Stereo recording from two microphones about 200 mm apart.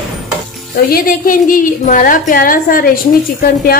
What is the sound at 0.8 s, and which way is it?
A woman's voice, 45° left (ahead or behind).